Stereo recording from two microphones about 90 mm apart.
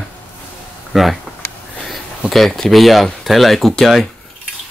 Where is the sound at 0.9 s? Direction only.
Centre (ahead or behind).